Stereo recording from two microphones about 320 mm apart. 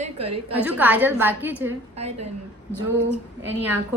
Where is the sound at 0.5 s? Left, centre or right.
Centre.